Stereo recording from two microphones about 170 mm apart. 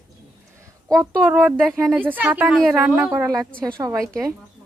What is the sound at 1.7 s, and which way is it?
A child's voice, 15° right (ahead or behind).